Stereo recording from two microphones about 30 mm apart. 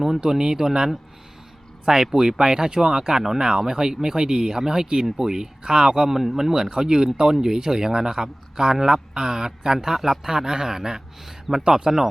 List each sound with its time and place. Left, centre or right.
0.2 s speech: right
6.1 s speech: centre
11.6 s speech: centre